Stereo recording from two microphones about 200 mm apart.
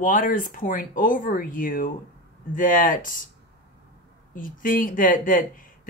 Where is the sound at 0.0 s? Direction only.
40° left (ahead or behind).